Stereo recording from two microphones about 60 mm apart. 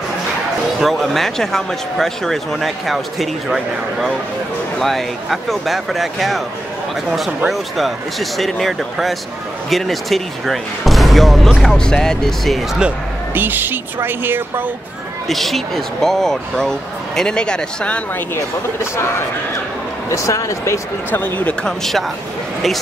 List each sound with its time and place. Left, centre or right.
0.7 s speech: centre
7.4 s speech: centre
11.5 s speech: centre
13.3 s a woman's voice: right
15.2 s speech: centre
20.1 s speech: left
21.6 s speech: centre